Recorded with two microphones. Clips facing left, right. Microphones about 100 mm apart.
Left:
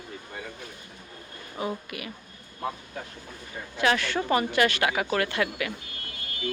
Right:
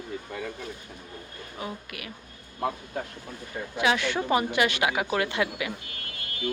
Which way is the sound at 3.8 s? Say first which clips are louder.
Even; 15° right (ahead or behind).